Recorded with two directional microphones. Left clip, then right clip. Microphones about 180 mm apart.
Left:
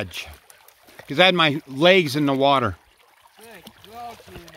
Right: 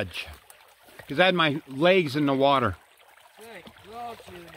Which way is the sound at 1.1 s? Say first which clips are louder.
Left 5 dB; 40° left (ahead or behind).